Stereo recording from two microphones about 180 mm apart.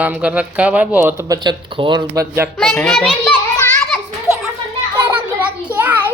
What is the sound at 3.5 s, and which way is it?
Children playing, 15° left (ahead or behind).